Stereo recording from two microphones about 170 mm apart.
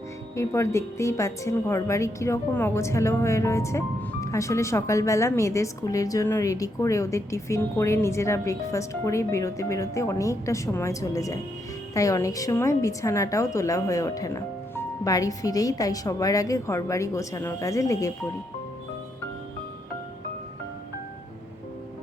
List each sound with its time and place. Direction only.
0.3 s a woman's voice: 15° left (ahead or behind)